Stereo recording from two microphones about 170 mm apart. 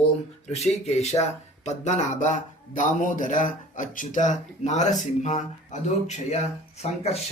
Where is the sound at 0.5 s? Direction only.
40° left (ahead or behind).